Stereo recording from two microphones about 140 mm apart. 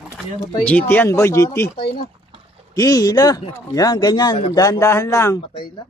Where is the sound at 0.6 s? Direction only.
10° left (ahead or behind).